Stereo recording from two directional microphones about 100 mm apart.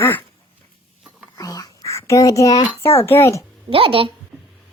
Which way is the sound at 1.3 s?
35° left (ahead or behind).